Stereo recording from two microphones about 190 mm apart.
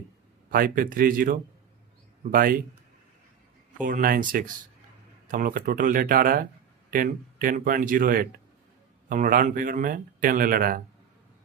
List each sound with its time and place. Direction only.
0.5 s a man's voice: 50° right (ahead or behind)
3.8 s a man's voice: 45° right (ahead or behind)